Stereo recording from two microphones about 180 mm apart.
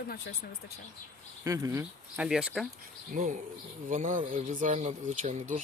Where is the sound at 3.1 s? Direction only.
45° right (ahead or behind).